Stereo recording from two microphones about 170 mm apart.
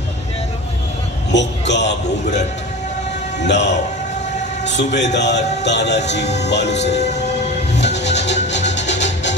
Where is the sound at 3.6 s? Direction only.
45° left (ahead or behind).